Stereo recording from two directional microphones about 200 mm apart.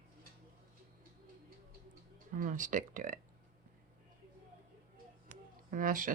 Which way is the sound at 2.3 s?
40° right (ahead or behind).